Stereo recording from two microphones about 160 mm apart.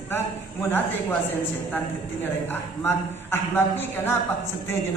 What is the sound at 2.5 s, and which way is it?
A man's voice, 15° left (ahead or behind).